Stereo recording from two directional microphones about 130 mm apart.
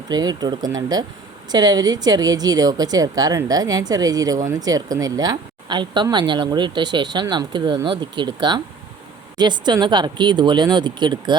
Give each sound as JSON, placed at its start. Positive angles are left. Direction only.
{"t": 0.1, "sound": "a woman's voice", "side_deg": -30}